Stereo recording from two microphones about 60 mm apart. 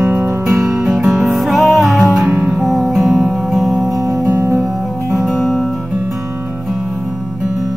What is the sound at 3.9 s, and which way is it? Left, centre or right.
Music, right.